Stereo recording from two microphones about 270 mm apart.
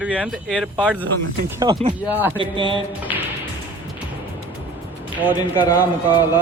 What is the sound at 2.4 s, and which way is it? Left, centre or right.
Speech, centre.